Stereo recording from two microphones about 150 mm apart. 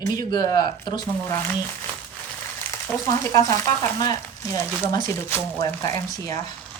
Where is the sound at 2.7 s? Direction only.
20° left (ahead or behind).